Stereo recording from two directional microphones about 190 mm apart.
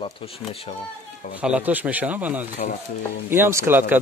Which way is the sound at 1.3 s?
5° right (ahead or behind).